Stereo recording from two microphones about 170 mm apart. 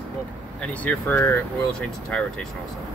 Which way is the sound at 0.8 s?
10° left (ahead or behind).